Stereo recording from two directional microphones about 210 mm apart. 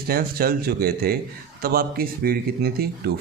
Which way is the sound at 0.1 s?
45° right (ahead or behind).